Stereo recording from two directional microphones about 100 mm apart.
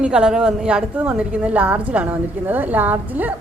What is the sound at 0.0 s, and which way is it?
A woman's voice, 10° right (ahead or behind).